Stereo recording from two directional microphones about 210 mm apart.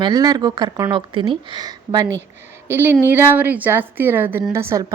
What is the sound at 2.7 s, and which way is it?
A woman's voice, 10° right (ahead or behind).